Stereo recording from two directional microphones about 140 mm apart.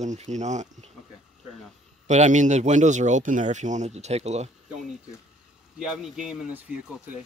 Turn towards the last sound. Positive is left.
turn(degrees=-10)  # may be behind; listen again after turning